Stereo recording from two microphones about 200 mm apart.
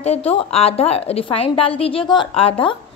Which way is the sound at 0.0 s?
30° left (ahead or behind).